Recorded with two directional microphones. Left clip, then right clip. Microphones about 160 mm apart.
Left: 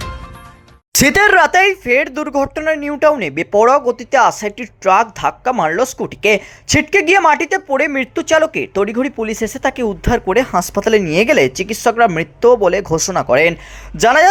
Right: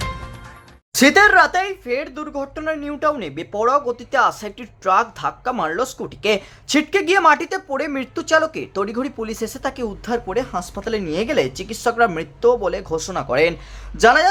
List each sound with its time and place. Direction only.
0.9 s speech: 35° left (ahead or behind)
2.6 s speech: 15° left (ahead or behind)
3.0 s speech: 30° left (ahead or behind)